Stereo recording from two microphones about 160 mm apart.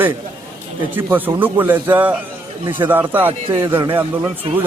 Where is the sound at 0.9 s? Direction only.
10° right (ahead or behind).